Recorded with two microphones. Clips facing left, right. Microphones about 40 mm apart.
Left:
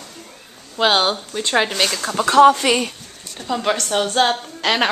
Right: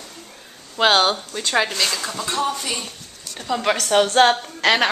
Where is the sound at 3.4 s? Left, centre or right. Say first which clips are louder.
Left 1 dB; centre.